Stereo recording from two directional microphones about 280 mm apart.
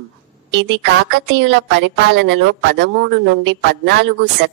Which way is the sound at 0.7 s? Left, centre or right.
Right.